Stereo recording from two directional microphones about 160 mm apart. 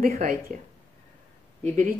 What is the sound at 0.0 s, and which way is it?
Speech, 65° right (ahead or behind).